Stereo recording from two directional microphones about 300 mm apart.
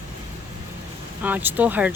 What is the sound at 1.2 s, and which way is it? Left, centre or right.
Speech, centre.